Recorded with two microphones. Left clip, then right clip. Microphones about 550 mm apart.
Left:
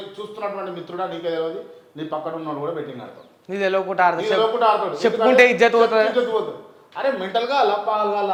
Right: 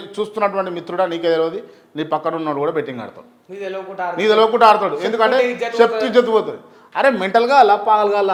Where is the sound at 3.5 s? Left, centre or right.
Left.